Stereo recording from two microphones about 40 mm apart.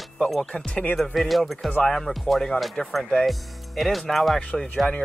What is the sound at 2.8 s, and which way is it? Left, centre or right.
Speech, centre.